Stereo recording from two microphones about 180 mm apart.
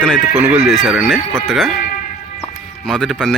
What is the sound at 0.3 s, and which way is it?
Speech, 5° right (ahead or behind).